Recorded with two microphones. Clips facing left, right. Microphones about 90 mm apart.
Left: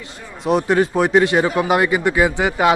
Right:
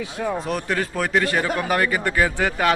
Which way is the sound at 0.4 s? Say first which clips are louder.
Left 8 dB; 25° left (ahead or behind).